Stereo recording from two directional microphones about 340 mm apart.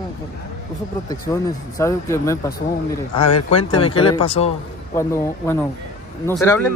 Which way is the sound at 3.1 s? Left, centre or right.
Left.